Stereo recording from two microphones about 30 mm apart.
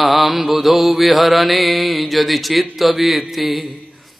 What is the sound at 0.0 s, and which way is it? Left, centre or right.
Mantra, centre.